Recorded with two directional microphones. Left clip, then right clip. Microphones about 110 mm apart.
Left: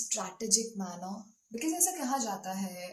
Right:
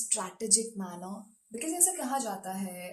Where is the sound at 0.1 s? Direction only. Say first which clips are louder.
Right 1 dB; 10° right (ahead or behind).